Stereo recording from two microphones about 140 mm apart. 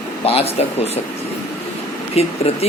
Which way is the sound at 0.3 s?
45° left (ahead or behind).